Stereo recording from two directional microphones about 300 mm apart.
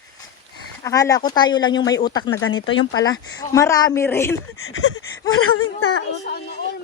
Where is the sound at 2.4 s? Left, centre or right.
Left.